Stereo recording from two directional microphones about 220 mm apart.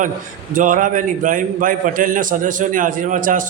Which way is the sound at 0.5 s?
35° right (ahead or behind).